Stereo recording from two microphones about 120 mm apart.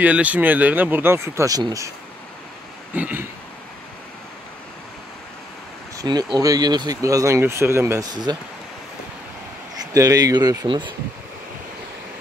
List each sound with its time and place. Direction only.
0.0 s speech: 10° right (ahead or behind); by 1.9 s 30° right (ahead or behind)
3.0 s a sound: 15° right (ahead or behind)
5.9 s speech: 35° right (ahead or behind)
8.1 s speech: 35° right (ahead or behind)
9.9 s speech: 30° right (ahead or behind)